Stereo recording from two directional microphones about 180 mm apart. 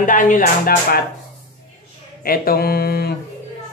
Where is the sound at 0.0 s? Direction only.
45° left (ahead or behind).